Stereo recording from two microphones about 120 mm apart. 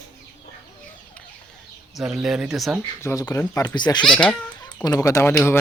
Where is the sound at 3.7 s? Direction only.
40° left (ahead or behind).